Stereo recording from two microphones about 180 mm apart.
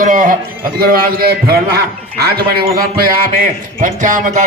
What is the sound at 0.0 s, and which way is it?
A man's voice, 45° right (ahead or behind).